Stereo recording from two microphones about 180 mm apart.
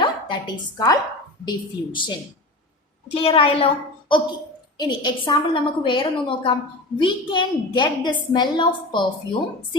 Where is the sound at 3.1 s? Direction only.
30° left (ahead or behind).